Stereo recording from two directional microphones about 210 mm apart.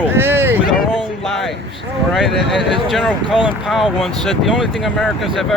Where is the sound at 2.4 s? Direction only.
55° left (ahead or behind).